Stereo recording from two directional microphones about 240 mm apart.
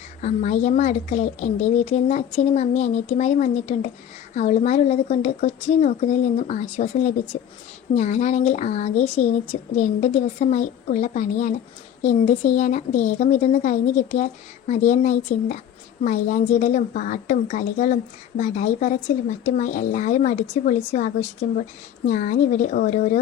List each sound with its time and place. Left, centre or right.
0.2 s a woman's voice: left